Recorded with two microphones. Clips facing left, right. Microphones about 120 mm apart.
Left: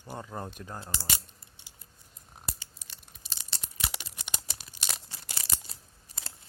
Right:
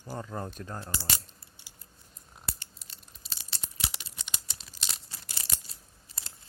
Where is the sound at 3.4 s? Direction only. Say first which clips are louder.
Left 1 dB; 60° left (ahead or behind).